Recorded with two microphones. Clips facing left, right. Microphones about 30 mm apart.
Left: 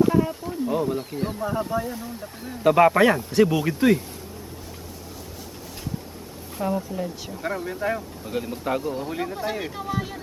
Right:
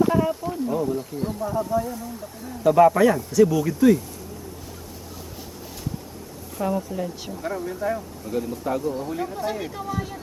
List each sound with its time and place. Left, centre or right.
0.0 s a sound: centre
0.7 s speech: left
2.7 s speech: left
6.6 s speech: centre
7.4 s speech: left